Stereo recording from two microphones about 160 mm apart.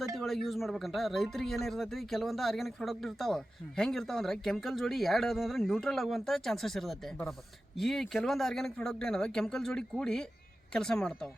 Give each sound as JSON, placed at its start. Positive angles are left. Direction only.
{"t": 0.2, "sound": "speech", "side_deg": 0}